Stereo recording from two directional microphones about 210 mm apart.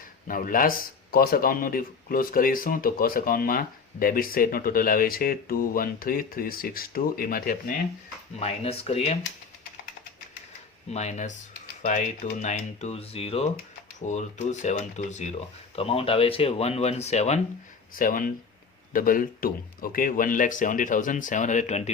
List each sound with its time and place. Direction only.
0.3 s speech: 40° left (ahead or behind)
8.4 s speech: 30° left (ahead or behind)
10.9 s speech: 35° left (ahead or behind)
17.9 s speech: 40° left (ahead or behind)